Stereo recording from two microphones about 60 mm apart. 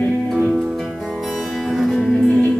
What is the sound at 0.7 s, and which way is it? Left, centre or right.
Music, centre.